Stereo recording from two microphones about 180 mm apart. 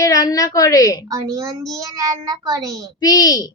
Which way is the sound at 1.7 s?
20° right (ahead or behind).